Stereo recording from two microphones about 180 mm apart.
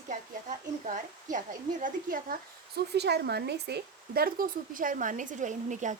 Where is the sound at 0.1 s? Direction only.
45° right (ahead or behind).